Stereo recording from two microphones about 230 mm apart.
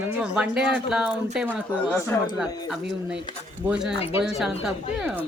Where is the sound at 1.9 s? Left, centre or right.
Centre.